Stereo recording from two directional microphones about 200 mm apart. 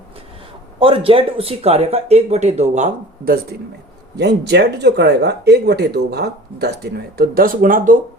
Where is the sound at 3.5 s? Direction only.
55° right (ahead or behind).